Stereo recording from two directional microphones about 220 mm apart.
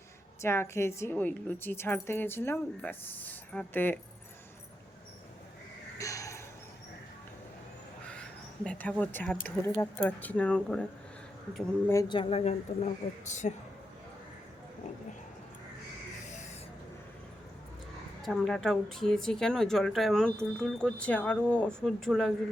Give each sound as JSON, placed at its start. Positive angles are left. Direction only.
{"t": 0.4, "sound": "a woman's voice", "side_deg": 10}
{"t": 6.0, "sound": "a sound", "side_deg": 15}
{"t": 8.0, "sound": "speech", "side_deg": 5}
{"t": 18.2, "sound": "speech", "side_deg": 0}